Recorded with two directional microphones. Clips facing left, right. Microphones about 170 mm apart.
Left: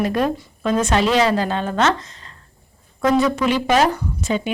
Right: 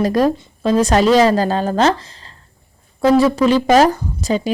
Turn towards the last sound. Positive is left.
turn(degrees=-35)  # may be behind; listen again after turning